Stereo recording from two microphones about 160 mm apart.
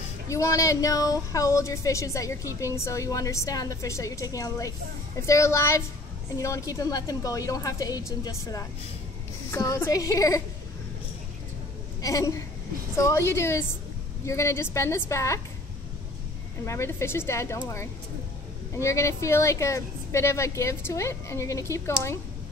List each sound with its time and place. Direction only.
0.3 s speech: 20° left (ahead or behind)
12.0 s a woman's voice: 20° left (ahead or behind)
16.6 s speech: 15° left (ahead or behind)
18.8 s speech: 20° left (ahead or behind)